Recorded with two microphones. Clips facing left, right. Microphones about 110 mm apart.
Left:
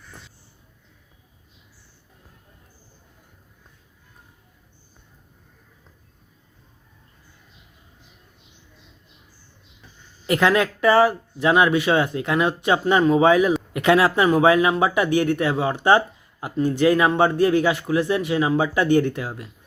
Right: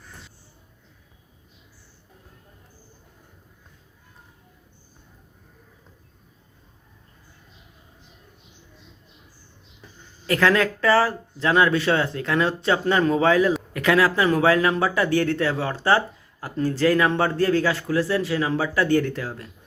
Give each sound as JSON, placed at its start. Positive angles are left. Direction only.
{"t": 10.2, "sound": "speech", "side_deg": 20}
{"t": 13.0, "sound": "speech", "side_deg": 5}